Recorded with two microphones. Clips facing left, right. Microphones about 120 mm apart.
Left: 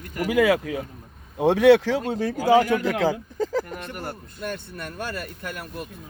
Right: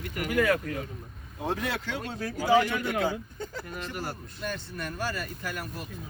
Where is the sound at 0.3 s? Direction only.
90° left.